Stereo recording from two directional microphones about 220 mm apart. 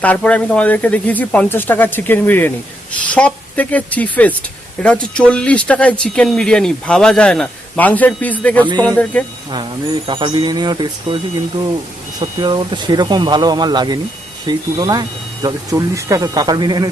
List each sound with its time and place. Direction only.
0.0 s speech: 5° left (ahead or behind)
9.5 s speech: 20° right (ahead or behind)
12.2 s speech: 20° right (ahead or behind)